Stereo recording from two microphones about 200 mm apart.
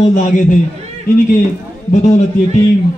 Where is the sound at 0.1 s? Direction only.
40° left (ahead or behind).